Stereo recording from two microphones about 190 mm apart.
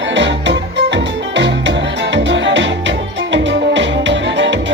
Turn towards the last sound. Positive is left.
turn(degrees=-75)  # may be behind; listen again after turning